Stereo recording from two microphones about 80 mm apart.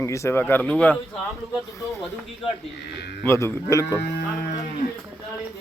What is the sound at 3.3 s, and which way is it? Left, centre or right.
Speech, left.